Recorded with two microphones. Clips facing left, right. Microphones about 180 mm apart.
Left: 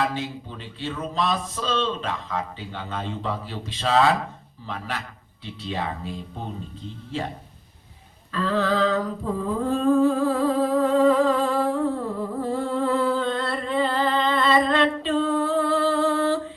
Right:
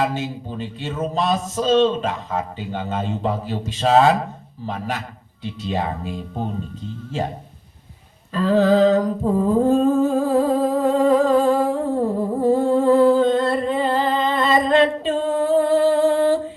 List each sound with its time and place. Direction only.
0.1 s a man's voice: 40° right (ahead or behind)
8.3 s humming: 40° right (ahead or behind)